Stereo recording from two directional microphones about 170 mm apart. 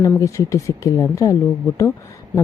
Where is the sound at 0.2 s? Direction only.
20° left (ahead or behind).